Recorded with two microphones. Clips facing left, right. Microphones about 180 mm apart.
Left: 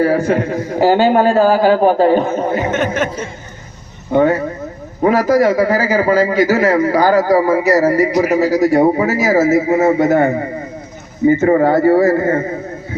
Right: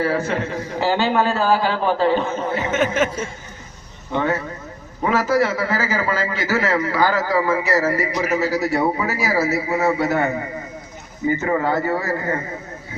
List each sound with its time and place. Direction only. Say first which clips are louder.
0.0 s a man's voice: left 7 dB; 45° left (ahead or behind)
2.7 s speech: left 2 dB; 5° right (ahead or behind)
4.1 s a man's voice: left 9 dB; 45° left (ahead or behind)